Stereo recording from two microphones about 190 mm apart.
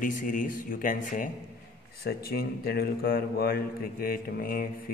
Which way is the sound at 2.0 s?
55° left (ahead or behind).